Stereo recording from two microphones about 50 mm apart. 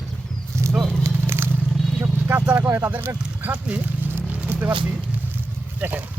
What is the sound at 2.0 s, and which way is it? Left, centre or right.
Vehicle, right.